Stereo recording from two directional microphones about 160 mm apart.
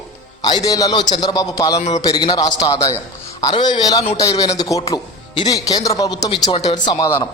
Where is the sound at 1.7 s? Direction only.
45° left (ahead or behind).